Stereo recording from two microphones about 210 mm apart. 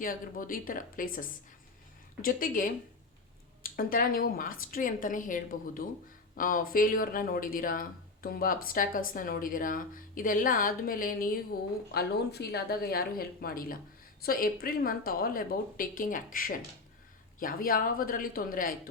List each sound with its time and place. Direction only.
0.0 s a woman's voice: 40° left (ahead or behind)